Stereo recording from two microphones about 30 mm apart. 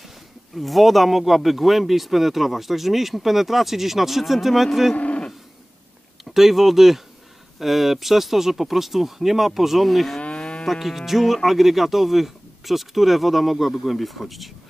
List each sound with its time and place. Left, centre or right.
0.6 s speech: centre
4.9 s cattle: left
6.2 s speech: centre
10.2 s moo: left
10.7 s speech: centre